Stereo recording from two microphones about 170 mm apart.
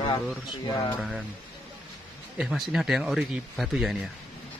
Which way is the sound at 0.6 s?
20° left (ahead or behind).